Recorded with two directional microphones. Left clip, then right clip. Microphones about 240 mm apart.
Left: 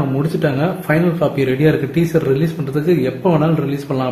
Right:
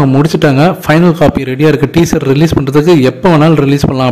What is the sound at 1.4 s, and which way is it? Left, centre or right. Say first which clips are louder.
A man's voice: right 6 dB; right.